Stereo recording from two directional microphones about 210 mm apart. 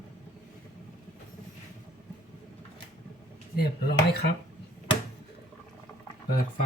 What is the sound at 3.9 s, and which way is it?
Speech, 50° left (ahead or behind).